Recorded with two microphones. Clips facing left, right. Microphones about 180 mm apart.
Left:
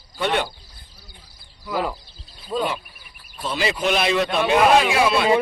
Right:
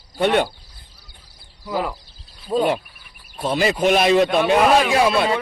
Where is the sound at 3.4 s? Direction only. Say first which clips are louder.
Right 5 dB; 50° right (ahead or behind).